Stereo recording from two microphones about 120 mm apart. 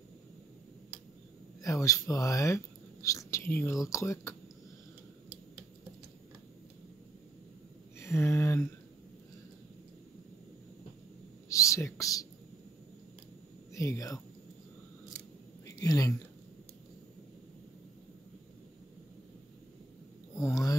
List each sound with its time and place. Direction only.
1.6 s speech: 25° left (ahead or behind)
8.0 s speech: 20° left (ahead or behind)
11.4 s whispering: 25° left (ahead or behind)
13.7 s speech: 25° left (ahead or behind)
15.6 s a sound: 30° left (ahead or behind)
20.3 s a sound: 25° left (ahead or behind)